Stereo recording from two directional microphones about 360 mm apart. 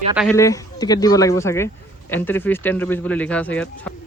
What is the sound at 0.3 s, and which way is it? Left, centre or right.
Speech, centre.